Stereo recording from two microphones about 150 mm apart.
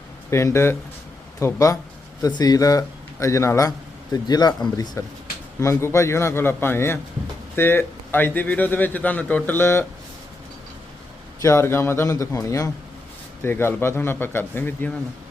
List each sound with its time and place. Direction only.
0.3 s a man's voice: 20° left (ahead or behind)
11.4 s a man's voice: 20° left (ahead or behind)